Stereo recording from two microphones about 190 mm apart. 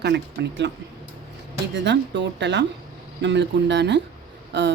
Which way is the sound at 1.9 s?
65° right (ahead or behind).